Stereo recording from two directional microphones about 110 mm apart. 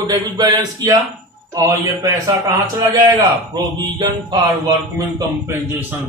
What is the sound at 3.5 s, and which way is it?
A man's voice, 40° right (ahead or behind).